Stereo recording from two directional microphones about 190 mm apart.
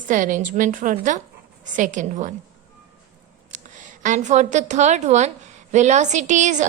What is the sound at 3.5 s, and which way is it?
A woman's voice, 40° right (ahead or behind).